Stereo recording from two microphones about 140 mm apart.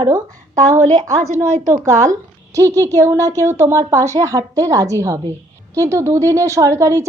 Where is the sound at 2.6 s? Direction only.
20° right (ahead or behind).